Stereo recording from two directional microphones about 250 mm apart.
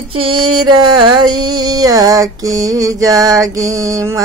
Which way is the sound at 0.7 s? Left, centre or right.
Centre.